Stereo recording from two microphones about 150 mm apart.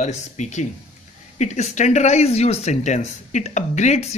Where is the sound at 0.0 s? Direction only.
50° left (ahead or behind).